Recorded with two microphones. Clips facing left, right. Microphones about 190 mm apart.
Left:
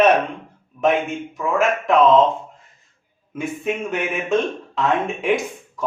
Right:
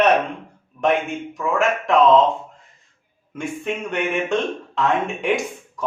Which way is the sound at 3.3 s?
5° left (ahead or behind).